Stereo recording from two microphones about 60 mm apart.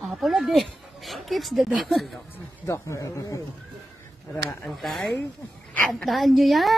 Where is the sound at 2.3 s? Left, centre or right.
Left.